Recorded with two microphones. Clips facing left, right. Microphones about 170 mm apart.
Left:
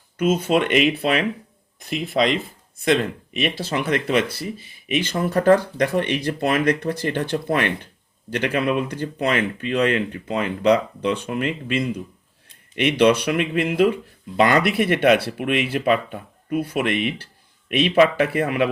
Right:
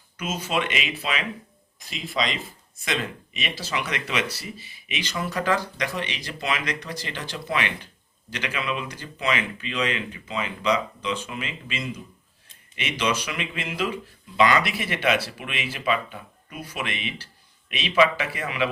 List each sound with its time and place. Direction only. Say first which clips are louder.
0.2 s speech: left 9 dB; 55° left (ahead or behind)